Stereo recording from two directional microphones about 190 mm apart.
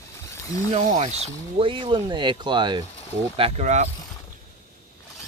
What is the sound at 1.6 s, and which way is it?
Speech, 25° right (ahead or behind).